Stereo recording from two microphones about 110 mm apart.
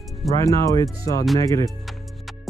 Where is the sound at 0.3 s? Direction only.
30° left (ahead or behind).